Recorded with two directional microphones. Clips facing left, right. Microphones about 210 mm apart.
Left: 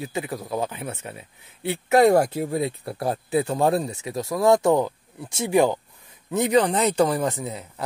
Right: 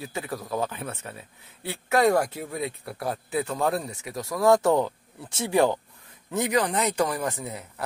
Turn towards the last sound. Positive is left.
turn(degrees=20)  # may be behind; listen again after turning